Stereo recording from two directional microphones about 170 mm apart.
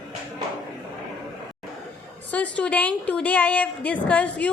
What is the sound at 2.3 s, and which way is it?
A woman's voice, 5° left (ahead or behind).